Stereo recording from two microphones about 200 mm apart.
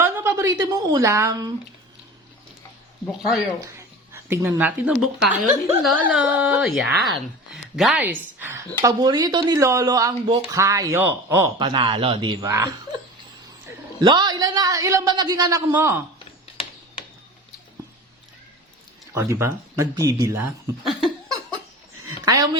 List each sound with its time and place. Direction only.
0.0 s a woman's voice: 10° right (ahead or behind)
3.1 s speech: centre (ahead or behind)
3.8 s a woman's voice: 15° right (ahead or behind)
11.6 s a man's voice: 25° right (ahead or behind)
14.0 s a man's voice: 20° right (ahead or behind)
19.1 s speech: 15° right (ahead or behind)
20.8 s laughter: centre (ahead or behind)